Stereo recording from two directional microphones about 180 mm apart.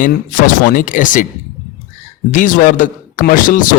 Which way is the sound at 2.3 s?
45° left (ahead or behind).